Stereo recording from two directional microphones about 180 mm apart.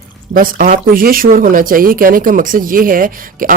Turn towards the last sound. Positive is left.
turn(degrees=-50)  # may be behind; listen again after turning